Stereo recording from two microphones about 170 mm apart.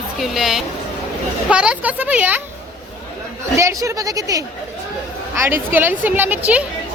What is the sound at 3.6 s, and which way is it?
A woman's voice, 15° right (ahead or behind).